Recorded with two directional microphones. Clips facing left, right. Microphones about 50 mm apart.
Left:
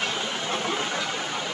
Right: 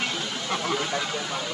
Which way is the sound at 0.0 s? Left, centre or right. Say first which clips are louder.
Left 1 dB; left.